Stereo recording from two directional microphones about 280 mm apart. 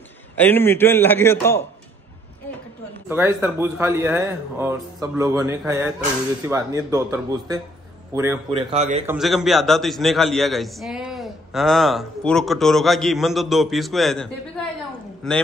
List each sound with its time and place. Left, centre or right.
0.4 s a man's voice: centre
3.1 s speech: centre; by 9.0 s right
9.0 s a man's voice: centre